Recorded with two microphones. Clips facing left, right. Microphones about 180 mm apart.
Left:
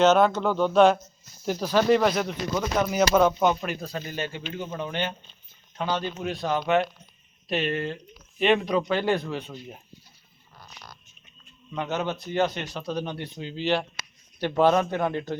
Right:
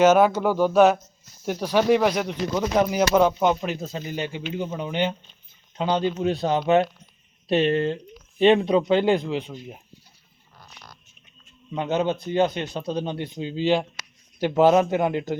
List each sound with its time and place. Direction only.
0.0 s speech: 10° right (ahead or behind)
11.7 s speech: 20° right (ahead or behind)